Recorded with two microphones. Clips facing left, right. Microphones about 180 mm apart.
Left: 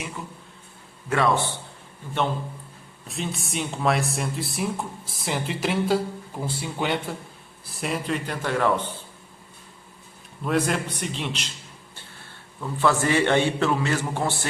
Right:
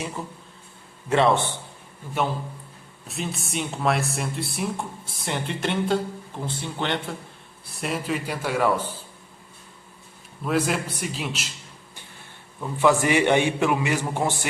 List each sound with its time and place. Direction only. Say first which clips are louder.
0.2 s speech: right 3 dB; 35° right (ahead or behind)
1.1 s a man's voice: right 2 dB; 25° right (ahead or behind)
2.2 s a man's voice: even; 10° right (ahead or behind)
10.4 s speech: even; centre (ahead or behind)
11.9 s a man's voice: even; 15° right (ahead or behind)